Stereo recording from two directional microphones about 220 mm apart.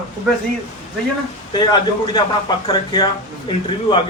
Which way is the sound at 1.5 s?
20° left (ahead or behind).